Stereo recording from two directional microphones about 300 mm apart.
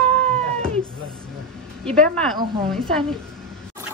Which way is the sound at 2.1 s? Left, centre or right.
Centre.